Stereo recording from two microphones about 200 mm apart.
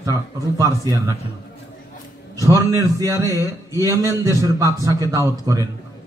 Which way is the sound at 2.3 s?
15° right (ahead or behind).